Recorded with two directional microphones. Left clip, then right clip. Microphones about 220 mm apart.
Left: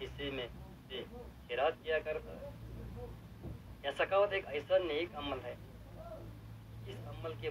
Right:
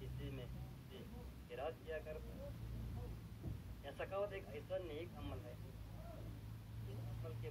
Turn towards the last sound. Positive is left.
turn(degrees=20)  # may be behind; listen again after turning